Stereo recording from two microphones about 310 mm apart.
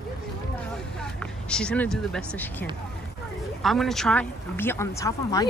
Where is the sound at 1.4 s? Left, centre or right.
Centre.